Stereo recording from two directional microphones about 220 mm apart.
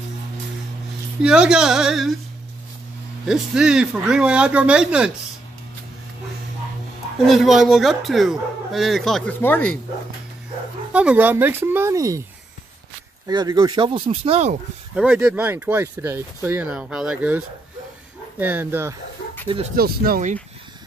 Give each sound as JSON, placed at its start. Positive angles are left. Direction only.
{"t": 1.2, "sound": "a man's voice", "side_deg": -5}
{"t": 3.3, "sound": "a man's voice", "side_deg": -5}
{"t": 7.2, "sound": "a man's voice", "side_deg": 0}
{"t": 10.9, "sound": "speech", "side_deg": -5}
{"t": 13.3, "sound": "speech", "side_deg": -20}
{"t": 15.0, "sound": "speech", "side_deg": -5}
{"t": 18.4, "sound": "speech", "side_deg": -10}
{"t": 19.4, "sound": "speech", "side_deg": -25}
{"t": 19.7, "sound": "speech", "side_deg": -45}